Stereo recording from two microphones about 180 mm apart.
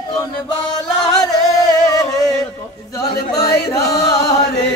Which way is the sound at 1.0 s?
20° left (ahead or behind).